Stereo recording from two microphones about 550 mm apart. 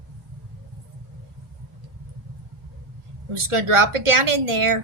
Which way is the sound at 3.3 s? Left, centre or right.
Right.